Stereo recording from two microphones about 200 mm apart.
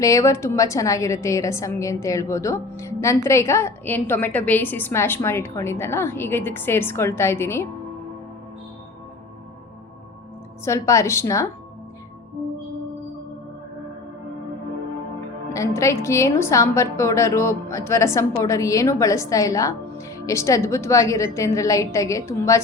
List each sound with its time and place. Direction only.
0.0 s a woman's voice: 15° left (ahead or behind)
10.7 s a woman's voice: 15° left (ahead or behind)
15.5 s a woman's voice: 15° left (ahead or behind)